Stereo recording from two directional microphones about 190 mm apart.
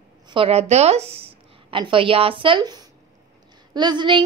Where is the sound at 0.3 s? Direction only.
30° right (ahead or behind).